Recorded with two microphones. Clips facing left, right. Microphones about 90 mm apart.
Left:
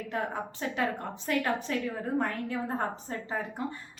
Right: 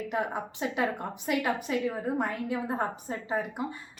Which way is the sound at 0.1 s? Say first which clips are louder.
Even; 15° right (ahead or behind).